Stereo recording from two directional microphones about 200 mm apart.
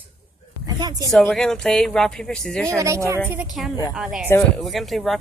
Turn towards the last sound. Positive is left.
turn(degrees=0)  # may be behind; listen again after turning